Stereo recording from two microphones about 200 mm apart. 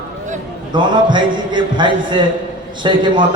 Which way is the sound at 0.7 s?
20° right (ahead or behind).